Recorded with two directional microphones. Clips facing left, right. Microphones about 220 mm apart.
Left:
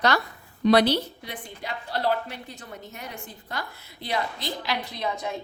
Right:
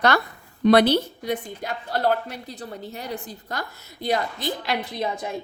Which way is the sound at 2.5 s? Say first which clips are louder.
Right 6 dB; 35° right (ahead or behind).